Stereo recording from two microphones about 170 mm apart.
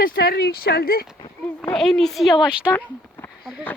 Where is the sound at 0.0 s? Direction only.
60° left (ahead or behind).